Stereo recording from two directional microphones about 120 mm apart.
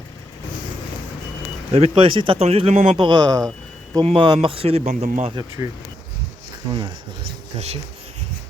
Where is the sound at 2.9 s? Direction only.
45° right (ahead or behind); by 5.3 s 70° right (ahead or behind).